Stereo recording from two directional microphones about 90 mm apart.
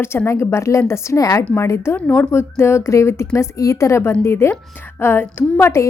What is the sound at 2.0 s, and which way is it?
Speech, 15° left (ahead or behind).